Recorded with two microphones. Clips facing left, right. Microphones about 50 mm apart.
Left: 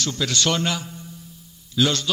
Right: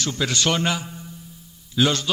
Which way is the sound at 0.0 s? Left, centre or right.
Centre.